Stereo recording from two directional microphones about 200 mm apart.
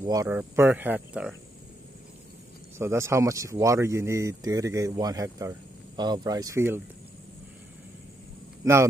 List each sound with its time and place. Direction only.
0.0 s speech: 15° right (ahead or behind)
2.8 s speech: 15° right (ahead or behind)